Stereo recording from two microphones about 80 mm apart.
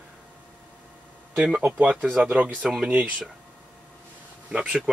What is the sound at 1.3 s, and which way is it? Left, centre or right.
Speech, centre.